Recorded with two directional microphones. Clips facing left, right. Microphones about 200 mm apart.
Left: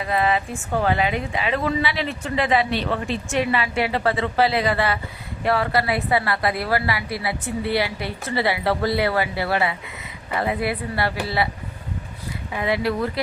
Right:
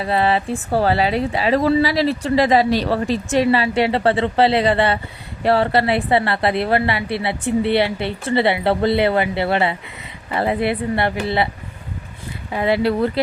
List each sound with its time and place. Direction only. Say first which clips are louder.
0.0 s a woman's voice: right 3 dB; 30° right (ahead or behind)
12.5 s a woman's voice: right 5 dB; 30° right (ahead or behind)